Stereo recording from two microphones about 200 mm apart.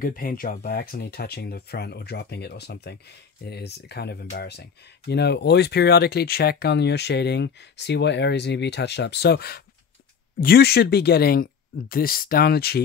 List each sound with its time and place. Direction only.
0.0 s speech: 45° left (ahead or behind)